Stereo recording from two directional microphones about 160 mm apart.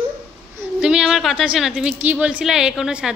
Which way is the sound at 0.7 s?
5° right (ahead or behind).